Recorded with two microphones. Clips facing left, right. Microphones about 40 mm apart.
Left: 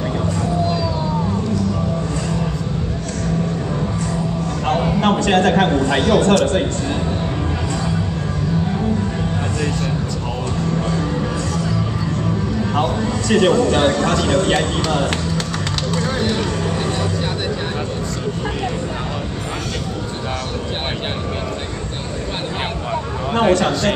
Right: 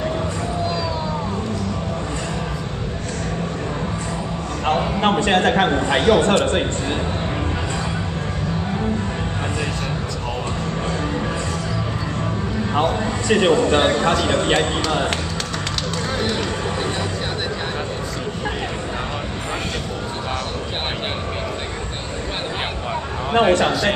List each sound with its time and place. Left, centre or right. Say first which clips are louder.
5.0 s a man's voice: left 1 dB; centre
10.9 s music: left 2 dB; centre
12.7 s a man's voice: right 1 dB; centre
16.0 s a sound: left 2 dB; centre
23.5 s a man's voice: left 1 dB; centre